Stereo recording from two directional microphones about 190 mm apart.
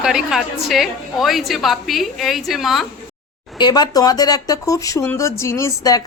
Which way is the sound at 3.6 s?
20° left (ahead or behind).